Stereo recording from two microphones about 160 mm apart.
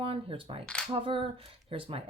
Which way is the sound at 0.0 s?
35° right (ahead or behind).